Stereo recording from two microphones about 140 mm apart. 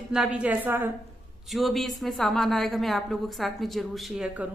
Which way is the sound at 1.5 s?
Centre (ahead or behind).